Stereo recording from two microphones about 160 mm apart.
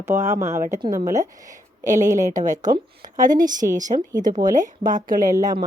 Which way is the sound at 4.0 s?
25° right (ahead or behind).